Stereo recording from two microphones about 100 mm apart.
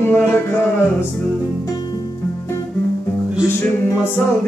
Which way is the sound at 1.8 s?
45° left (ahead or behind).